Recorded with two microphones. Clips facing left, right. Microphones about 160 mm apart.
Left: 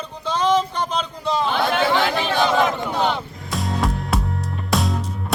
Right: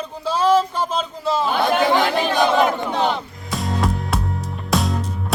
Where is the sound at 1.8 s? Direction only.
15° right (ahead or behind).